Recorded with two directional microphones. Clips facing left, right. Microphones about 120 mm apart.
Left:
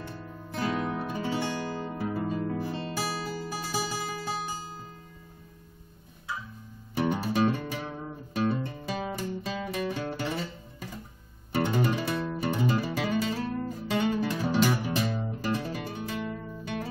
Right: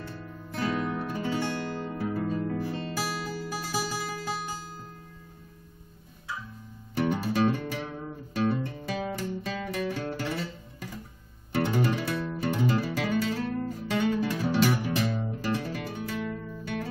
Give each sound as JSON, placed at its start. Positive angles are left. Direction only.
{"t": 0.0, "sound": "guitar", "side_deg": 15}
{"t": 3.8, "sound": "music", "side_deg": 15}
{"t": 7.0, "sound": "music", "side_deg": 15}